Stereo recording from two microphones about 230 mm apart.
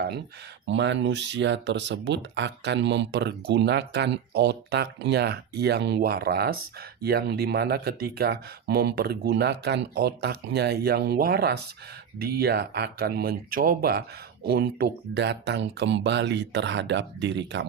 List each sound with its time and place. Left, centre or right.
0.7 s speech: right